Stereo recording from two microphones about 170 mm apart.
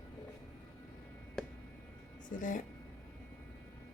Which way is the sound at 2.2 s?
50° left (ahead or behind).